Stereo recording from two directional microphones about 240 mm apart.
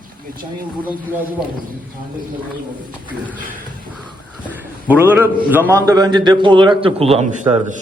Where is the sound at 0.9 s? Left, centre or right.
Centre.